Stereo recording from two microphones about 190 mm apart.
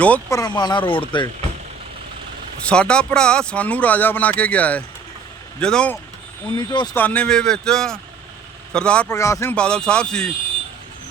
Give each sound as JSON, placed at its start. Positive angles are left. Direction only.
{"t": 0.0, "sound": "speech", "side_deg": 10}
{"t": 2.6, "sound": "speech", "side_deg": 5}
{"t": 6.6, "sound": "speech", "side_deg": 20}
{"t": 6.9, "sound": "speech", "side_deg": 5}